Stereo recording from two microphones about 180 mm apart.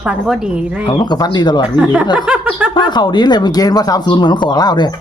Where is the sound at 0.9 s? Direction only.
25° left (ahead or behind).